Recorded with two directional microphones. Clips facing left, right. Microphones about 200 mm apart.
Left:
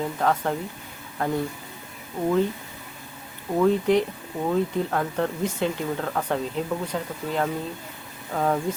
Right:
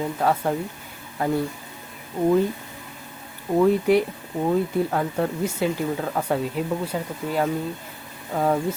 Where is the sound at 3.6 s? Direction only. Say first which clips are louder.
Right 1 dB; 10° right (ahead or behind).